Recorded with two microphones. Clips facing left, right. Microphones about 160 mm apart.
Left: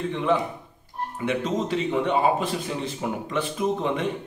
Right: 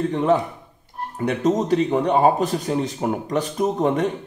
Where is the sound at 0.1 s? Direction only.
45° right (ahead or behind).